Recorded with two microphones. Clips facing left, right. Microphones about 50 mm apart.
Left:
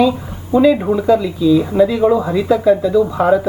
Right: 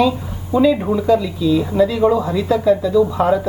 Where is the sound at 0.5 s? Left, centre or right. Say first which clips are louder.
Left 3 dB; centre.